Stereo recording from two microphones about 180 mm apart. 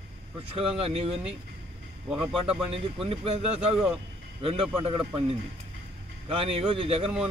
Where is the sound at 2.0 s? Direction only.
Centre (ahead or behind).